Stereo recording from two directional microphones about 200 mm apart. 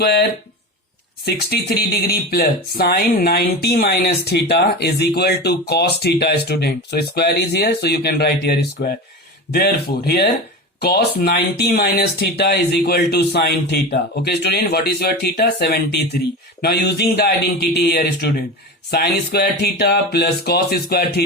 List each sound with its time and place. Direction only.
0.0 s speech: 55° left (ahead or behind)